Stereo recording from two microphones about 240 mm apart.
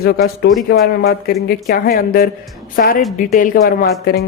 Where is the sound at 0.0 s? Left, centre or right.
Left.